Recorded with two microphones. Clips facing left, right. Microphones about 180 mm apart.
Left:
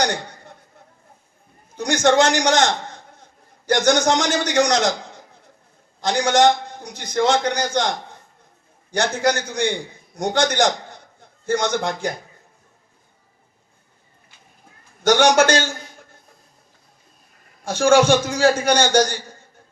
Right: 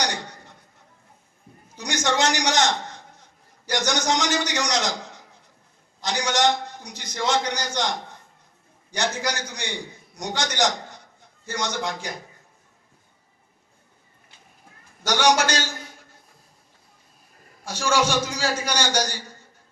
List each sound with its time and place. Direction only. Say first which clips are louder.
0.0 s chuckle: left 6 dB; 55° left (ahead or behind)
1.7 s a man's voice: left 8 dB; 55° left (ahead or behind)
15.0 s a man's voice: left 6 dB; 50° left (ahead or behind)
17.7 s a man's voice: left 8 dB; 50° left (ahead or behind)